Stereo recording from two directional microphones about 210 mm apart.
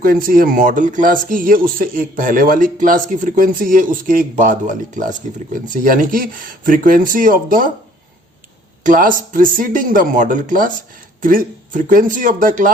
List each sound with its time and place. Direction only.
0.0 s speech: 45° right (ahead or behind)
8.8 s speech: 40° right (ahead or behind)